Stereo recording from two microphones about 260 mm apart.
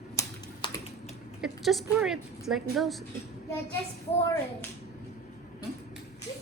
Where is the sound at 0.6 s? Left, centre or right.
Centre.